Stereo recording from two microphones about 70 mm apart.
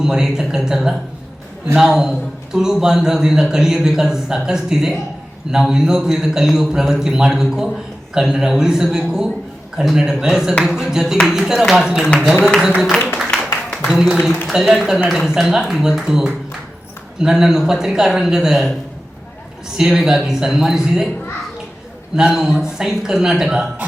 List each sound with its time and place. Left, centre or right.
0.0 s a man's voice: centre
12.9 s speech: centre
13.4 s a sound: centre
14.5 s a man's voice: centre
19.7 s a man's voice: centre
22.1 s a man's voice: centre